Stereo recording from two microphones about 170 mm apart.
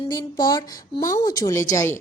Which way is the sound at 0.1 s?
20° left (ahead or behind).